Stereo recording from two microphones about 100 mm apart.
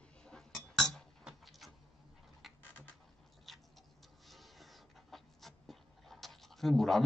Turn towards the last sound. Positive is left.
turn(degrees=0)  # may be behind; listen again after turning